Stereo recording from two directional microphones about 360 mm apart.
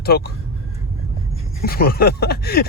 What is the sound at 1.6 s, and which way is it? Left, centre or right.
Speech, left.